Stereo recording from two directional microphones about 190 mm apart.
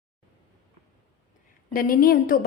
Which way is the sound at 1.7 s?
50° left (ahead or behind).